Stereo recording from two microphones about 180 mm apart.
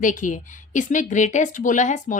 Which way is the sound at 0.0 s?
45° left (ahead or behind).